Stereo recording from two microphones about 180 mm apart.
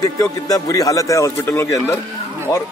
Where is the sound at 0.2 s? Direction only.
20° left (ahead or behind).